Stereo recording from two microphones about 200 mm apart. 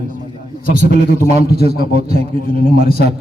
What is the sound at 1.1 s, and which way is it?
Speech, 35° right (ahead or behind).